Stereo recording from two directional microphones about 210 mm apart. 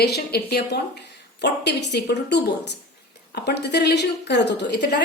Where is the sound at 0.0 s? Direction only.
50° left (ahead or behind).